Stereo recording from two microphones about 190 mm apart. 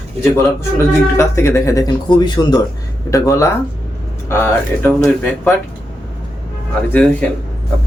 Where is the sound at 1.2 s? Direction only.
15° left (ahead or behind).